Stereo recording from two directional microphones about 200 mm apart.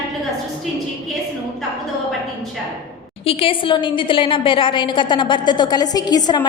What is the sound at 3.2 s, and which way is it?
A woman's voice, 25° left (ahead or behind).